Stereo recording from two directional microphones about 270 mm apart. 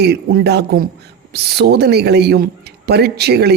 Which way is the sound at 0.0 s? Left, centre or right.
Right.